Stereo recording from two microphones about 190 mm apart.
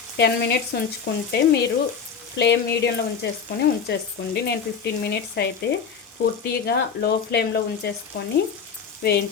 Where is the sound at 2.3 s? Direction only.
60° left (ahead or behind).